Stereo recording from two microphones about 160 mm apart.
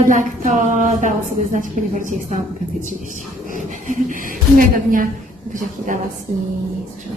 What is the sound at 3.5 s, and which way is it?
A woman's voice, 55° right (ahead or behind).